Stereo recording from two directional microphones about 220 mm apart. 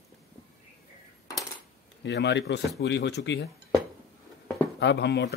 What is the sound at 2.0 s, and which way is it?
Speech, 50° left (ahead or behind).